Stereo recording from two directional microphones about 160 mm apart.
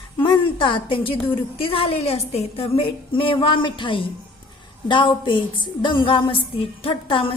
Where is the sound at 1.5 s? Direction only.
35° left (ahead or behind).